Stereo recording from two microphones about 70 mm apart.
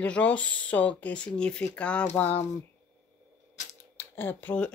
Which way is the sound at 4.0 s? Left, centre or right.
Left.